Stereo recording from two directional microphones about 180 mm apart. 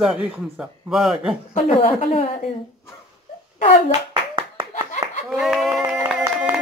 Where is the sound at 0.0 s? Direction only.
5° right (ahead or behind).